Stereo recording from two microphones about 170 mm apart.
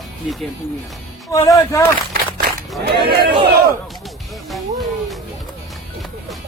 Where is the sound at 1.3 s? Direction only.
20° left (ahead or behind).